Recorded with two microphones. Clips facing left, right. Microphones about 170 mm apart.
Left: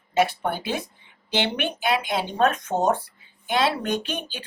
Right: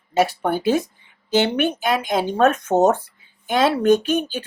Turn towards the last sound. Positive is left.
turn(degrees=-45)  # may be behind; listen again after turning